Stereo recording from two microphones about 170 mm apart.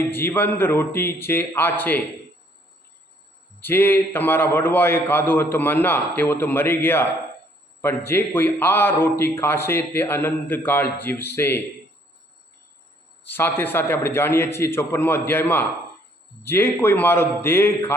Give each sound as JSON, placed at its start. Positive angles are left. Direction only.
{"t": 0.1, "sound": "a man's voice", "side_deg": 10}
{"t": 3.6, "sound": "a man's voice", "side_deg": 10}
{"t": 13.2, "sound": "a man's voice", "side_deg": 10}